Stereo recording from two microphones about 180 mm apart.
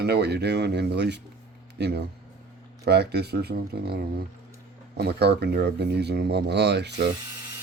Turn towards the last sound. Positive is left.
turn(degrees=-70)  # may be behind; listen again after turning